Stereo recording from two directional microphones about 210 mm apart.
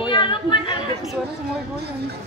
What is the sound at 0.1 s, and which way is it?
Chatter, 20° left (ahead or behind).